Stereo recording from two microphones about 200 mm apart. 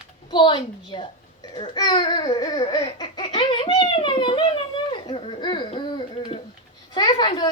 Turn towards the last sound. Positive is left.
turn(degrees=20)  # may be behind; listen again after turning